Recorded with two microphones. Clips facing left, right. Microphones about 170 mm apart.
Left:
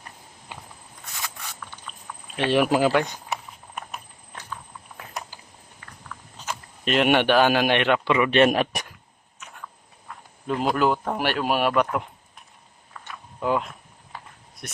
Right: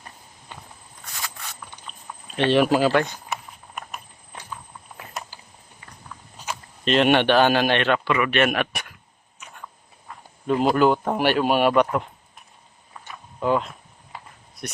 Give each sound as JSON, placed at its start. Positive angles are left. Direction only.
{"t": 2.3, "sound": "a man's voice", "side_deg": 10}
{"t": 6.9, "sound": "a man's voice", "side_deg": 10}
{"t": 10.1, "sound": "a sound", "side_deg": 0}
{"t": 10.4, "sound": "speech", "side_deg": 0}
{"t": 13.4, "sound": "speech", "side_deg": 5}
{"t": 14.1, "sound": "a sound", "side_deg": 0}